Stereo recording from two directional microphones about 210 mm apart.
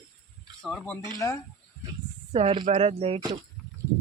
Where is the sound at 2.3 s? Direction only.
25° right (ahead or behind).